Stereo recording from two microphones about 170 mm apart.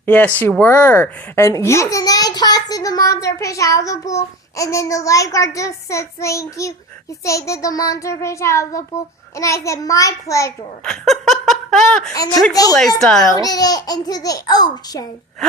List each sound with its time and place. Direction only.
0.0 s speech: 10° left (ahead or behind)
10.8 s laughter: centre (ahead or behind)
12.1 s speech: 20° left (ahead or behind)
13.0 s a child's voice: 5° left (ahead or behind)
13.3 s speech: 20° left (ahead or behind)